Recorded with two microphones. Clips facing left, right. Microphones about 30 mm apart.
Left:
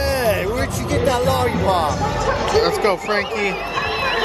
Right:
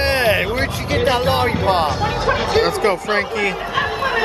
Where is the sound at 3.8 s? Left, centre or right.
Left.